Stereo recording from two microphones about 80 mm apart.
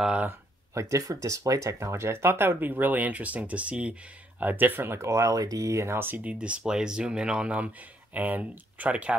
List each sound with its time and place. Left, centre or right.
0.0 s speech: centre
0.7 s speech: right; by 9.1 s centre